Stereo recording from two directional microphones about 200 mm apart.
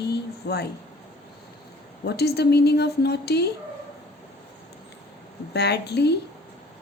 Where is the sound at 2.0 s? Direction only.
55° left (ahead or behind).